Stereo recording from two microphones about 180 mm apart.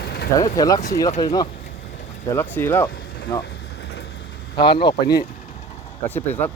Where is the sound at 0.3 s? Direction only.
20° left (ahead or behind).